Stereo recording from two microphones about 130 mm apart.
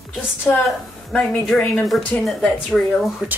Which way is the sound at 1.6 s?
10° left (ahead or behind).